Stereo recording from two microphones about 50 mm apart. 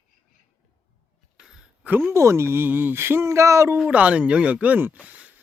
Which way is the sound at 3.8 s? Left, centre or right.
Right.